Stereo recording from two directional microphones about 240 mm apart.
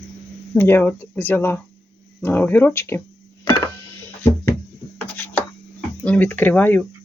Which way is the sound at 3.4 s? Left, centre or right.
Centre.